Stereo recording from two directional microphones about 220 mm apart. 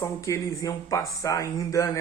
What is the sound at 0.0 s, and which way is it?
Speech, 10° left (ahead or behind).